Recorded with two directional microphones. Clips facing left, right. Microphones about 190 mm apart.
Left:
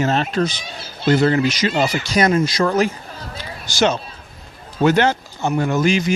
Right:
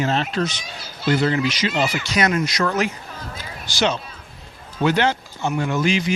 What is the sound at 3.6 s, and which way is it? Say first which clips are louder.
Speech: left 4 dB; 45° left (ahead or behind).